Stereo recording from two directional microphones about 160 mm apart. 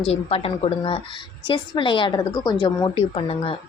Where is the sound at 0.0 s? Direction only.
35° left (ahead or behind).